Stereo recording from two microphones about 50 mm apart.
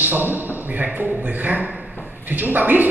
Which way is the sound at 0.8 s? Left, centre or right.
Right.